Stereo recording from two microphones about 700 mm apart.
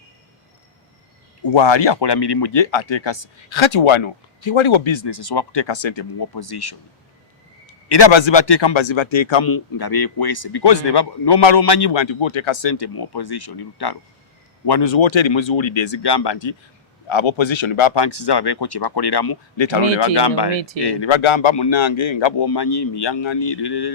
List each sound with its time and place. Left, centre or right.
1.4 s speech: left
7.9 s speech: left